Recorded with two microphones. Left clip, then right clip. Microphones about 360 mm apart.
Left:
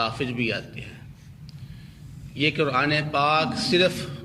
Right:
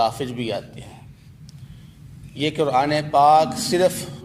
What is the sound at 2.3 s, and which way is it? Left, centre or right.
A man's voice, centre.